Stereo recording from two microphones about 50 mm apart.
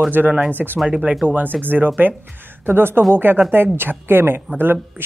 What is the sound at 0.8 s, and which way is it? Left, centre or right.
Speech, right.